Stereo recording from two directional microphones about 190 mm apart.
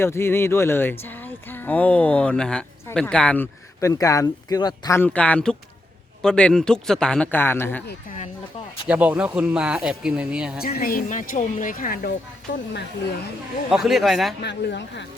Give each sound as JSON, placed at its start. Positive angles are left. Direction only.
{"t": 0.0, "sound": "speech", "side_deg": 10}
{"t": 8.9, "sound": "speech", "side_deg": -5}
{"t": 10.6, "sound": "speech", "side_deg": 50}
{"t": 13.7, "sound": "speech", "side_deg": 0}
{"t": 14.4, "sound": "speech", "side_deg": 65}